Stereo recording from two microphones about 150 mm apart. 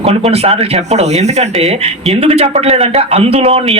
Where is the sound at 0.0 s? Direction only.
45° right (ahead or behind).